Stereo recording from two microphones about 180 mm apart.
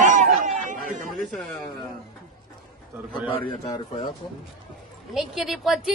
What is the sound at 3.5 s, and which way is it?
Speech, 25° left (ahead or behind).